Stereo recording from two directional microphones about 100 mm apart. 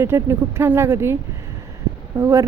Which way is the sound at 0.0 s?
25° right (ahead or behind).